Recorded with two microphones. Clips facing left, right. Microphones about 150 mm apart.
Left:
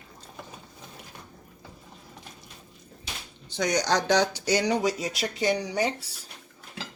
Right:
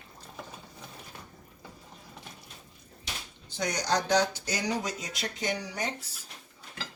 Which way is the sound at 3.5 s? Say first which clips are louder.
Left 5 dB; 80° left.